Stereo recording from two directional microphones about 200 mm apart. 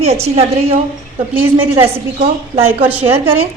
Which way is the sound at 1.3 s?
10° right (ahead or behind).